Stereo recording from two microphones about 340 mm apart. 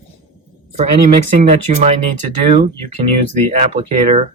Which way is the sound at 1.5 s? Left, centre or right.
Right.